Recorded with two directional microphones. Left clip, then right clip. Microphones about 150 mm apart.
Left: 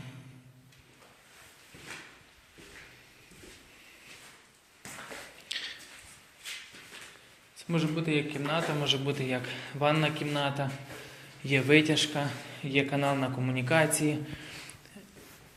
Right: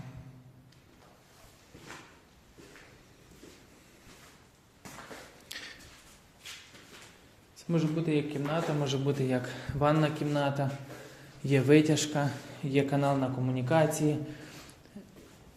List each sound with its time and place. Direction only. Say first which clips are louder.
5.5 s a sound: left 7 dB; 75° right (ahead or behind)
7.5 s a man's voice: even; 30° right (ahead or behind)
8.8 s a man's voice: left 2 dB; 50° right (ahead or behind); by 14.4 s 30° right (ahead or behind)